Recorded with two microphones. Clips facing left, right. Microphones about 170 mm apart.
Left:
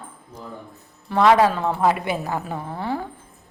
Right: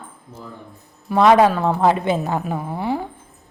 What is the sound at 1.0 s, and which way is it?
A woman's voice, 15° right (ahead or behind).